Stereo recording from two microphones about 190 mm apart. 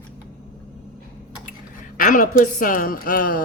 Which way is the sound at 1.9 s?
45° left (ahead or behind).